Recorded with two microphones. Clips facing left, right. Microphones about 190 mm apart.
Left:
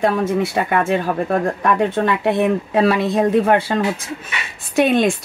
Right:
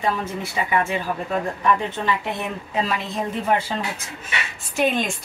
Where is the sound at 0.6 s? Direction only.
60° left (ahead or behind).